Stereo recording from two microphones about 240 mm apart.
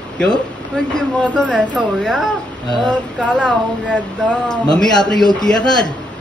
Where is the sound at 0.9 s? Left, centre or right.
Centre.